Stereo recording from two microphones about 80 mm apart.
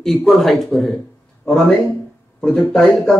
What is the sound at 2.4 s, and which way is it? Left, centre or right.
Speech, centre.